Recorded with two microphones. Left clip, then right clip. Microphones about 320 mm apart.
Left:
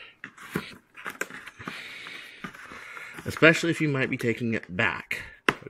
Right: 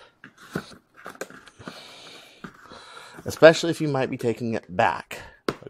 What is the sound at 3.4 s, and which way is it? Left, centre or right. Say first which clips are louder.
Speech: right 5 dB; centre.